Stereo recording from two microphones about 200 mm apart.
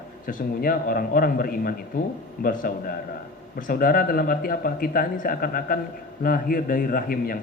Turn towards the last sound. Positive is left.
turn(degrees=45)  # may be behind; listen again after turning